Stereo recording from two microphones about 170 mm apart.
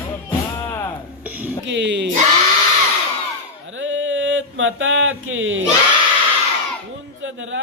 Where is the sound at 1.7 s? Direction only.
90° right.